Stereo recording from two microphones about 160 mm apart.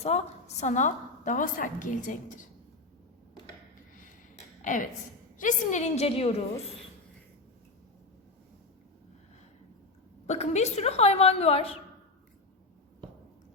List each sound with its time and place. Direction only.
0.0 s a woman's voice: 45° left (ahead or behind)
4.6 s a woman's voice: 50° left (ahead or behind)
10.2 s a woman's voice: 45° left (ahead or behind)